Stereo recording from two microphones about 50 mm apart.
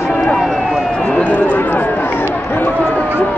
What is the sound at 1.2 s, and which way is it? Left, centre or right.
Run, left.